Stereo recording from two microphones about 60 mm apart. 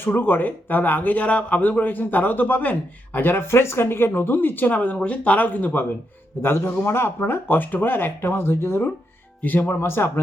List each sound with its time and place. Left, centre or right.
0.0 s speech: left
6.3 s speech: left